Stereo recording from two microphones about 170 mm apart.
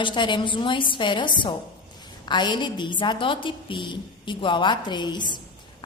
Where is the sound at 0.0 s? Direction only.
25° left (ahead or behind).